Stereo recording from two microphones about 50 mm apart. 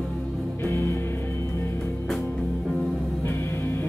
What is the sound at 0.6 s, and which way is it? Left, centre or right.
Music, left.